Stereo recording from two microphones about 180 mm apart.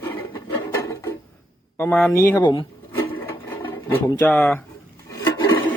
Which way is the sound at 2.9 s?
10° left (ahead or behind).